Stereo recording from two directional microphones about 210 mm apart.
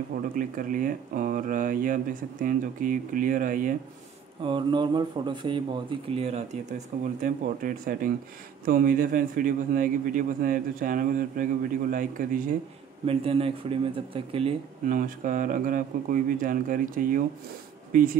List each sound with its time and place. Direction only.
0.4 s a man's voice: 40° right (ahead or behind)
4.4 s a man's voice: 25° right (ahead or behind); by 12.4 s 40° right (ahead or behind)
13.0 s speech: 25° right (ahead or behind)
14.9 s a man's voice: 40° right (ahead or behind)